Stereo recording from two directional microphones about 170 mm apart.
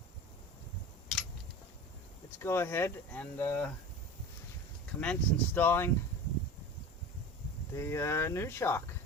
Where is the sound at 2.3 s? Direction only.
15° left (ahead or behind).